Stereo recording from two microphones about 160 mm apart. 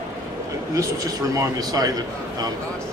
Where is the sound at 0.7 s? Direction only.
20° right (ahead or behind).